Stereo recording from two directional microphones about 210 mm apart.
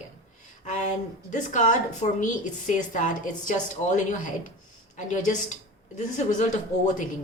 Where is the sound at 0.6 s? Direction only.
35° left (ahead or behind).